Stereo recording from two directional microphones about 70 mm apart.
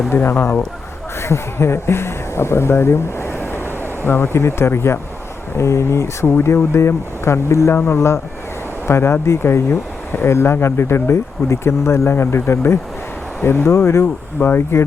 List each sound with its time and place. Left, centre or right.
0.1 s speech: left